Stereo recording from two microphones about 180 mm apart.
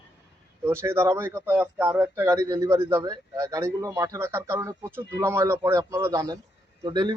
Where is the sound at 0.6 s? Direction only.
15° right (ahead or behind).